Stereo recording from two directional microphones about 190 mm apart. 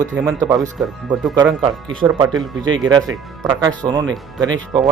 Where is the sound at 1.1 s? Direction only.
20° right (ahead or behind).